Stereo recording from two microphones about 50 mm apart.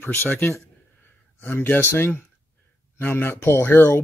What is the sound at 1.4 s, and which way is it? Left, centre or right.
Speech, left.